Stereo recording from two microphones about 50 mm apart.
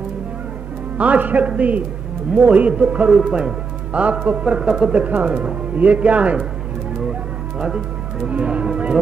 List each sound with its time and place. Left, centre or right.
0.9 s speech: right
7.6 s speech: centre